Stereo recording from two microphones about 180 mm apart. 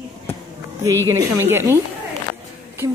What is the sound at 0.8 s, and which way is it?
A woman's voice, 15° right (ahead or behind).